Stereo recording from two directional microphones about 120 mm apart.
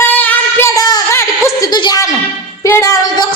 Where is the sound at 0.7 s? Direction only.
30° left (ahead or behind).